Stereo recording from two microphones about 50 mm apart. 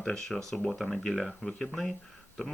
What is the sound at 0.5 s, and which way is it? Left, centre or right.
Speech, centre.